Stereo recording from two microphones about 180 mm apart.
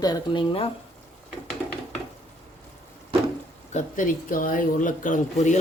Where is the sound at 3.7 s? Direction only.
45° left (ahead or behind).